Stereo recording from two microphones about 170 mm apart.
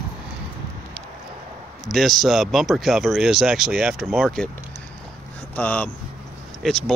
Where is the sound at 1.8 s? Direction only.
Centre (ahead or behind).